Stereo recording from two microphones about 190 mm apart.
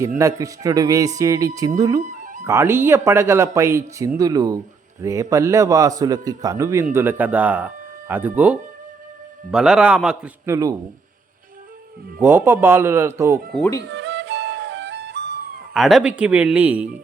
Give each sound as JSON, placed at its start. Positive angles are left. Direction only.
{"t": 0.0, "sound": "speech", "side_deg": -15}
{"t": 2.0, "sound": "music", "side_deg": -40}
{"t": 2.5, "sound": "a man's voice", "side_deg": -15}
{"t": 12.2, "sound": "speech", "side_deg": -10}
{"t": 13.8, "sound": "flute", "side_deg": -70}
{"t": 15.7, "sound": "a man's voice", "side_deg": 0}